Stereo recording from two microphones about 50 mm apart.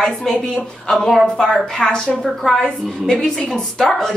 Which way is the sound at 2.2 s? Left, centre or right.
Centre.